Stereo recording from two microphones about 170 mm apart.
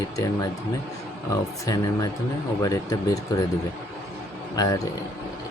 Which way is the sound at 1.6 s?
20° left (ahead or behind).